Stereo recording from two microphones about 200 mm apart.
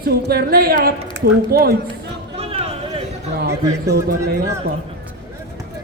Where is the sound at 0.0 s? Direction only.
50° right (ahead or behind).